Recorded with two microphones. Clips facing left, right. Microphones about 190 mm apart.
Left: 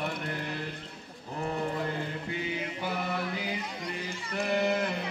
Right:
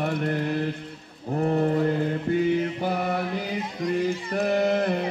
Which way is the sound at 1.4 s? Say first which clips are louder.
Right 10 dB; 45° right (ahead or behind).